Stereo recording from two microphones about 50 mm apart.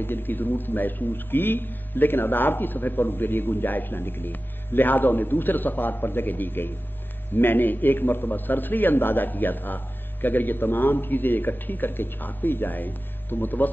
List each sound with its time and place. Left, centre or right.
0.0 s speech: left